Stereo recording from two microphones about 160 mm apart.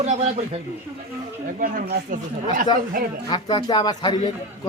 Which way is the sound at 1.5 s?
60° right (ahead or behind).